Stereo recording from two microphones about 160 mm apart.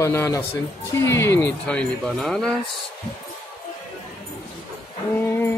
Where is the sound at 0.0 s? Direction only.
15° left (ahead or behind).